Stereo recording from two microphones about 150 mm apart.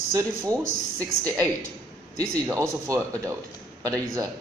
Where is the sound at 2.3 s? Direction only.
20° right (ahead or behind).